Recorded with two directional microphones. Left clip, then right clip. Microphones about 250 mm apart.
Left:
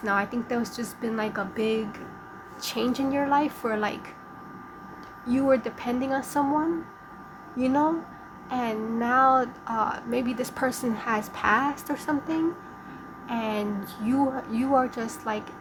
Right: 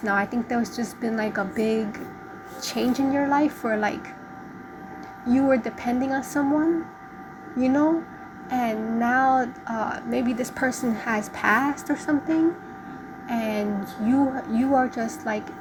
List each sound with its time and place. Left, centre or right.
0.0 s a woman's voice: centre
5.3 s a woman's voice: centre
7.6 s a woman's voice: centre